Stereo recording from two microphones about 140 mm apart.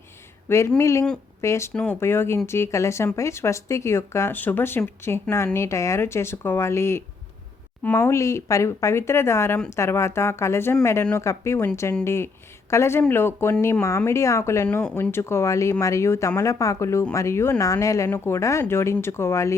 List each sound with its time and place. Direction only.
0.4 s speech: 20° left (ahead or behind)
1.7 s speech: 10° left (ahead or behind)